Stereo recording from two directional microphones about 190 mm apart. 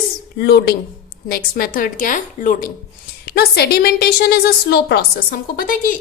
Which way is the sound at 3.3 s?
60° left (ahead or behind).